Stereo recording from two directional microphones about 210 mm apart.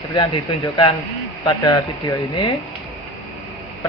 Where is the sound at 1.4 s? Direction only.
20° left (ahead or behind).